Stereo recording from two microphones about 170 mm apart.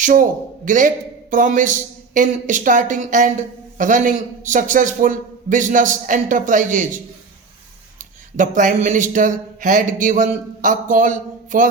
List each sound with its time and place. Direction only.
0.0 s a man's voice: 50° right (ahead or behind)